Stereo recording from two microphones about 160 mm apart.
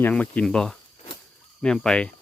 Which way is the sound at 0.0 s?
10° left (ahead or behind).